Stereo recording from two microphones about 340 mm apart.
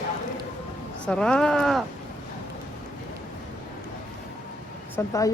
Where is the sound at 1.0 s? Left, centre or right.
Centre.